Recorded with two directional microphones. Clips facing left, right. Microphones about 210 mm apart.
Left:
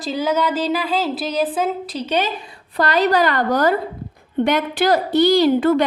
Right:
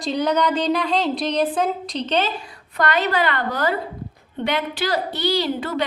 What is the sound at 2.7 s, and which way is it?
A woman's voice, 35° left (ahead or behind).